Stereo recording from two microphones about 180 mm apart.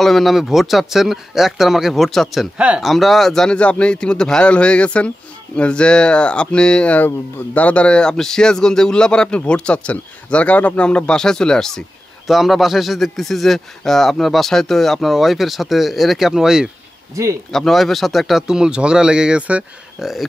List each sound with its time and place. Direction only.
0.0 s speech: centre (ahead or behind)
17.1 s speech: 15° right (ahead or behind)
17.5 s speech: centre (ahead or behind)